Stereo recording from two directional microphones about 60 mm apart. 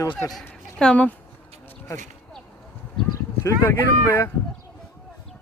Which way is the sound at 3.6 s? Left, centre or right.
Left.